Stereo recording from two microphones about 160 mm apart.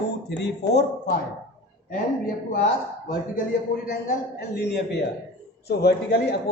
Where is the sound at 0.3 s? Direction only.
90° left.